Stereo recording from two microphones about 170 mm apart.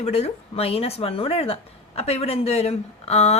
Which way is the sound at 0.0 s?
35° left (ahead or behind).